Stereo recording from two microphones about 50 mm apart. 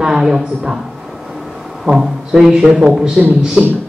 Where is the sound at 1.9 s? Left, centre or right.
Centre.